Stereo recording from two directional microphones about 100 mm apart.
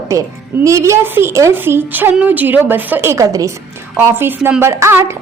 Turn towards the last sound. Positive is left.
turn(degrees=-25)  # may be behind; listen again after turning